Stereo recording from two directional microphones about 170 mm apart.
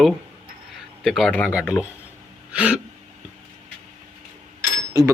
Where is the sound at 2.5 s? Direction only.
5° right (ahead or behind).